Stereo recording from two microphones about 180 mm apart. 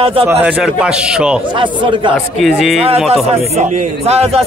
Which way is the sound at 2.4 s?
5° right (ahead or behind).